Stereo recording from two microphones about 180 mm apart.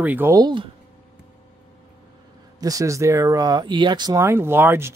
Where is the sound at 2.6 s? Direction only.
20° right (ahead or behind).